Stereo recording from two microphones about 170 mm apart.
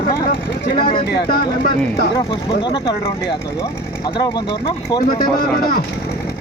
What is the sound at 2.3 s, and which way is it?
Speech, 30° left (ahead or behind).